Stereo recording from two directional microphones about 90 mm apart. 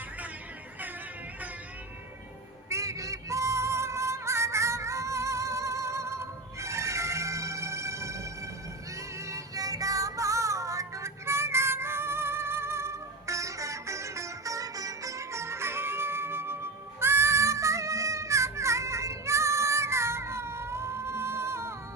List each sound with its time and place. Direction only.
2.6 s music: 35° right (ahead or behind)